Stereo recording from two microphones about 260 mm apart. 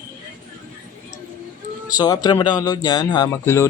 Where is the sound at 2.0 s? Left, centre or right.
Centre.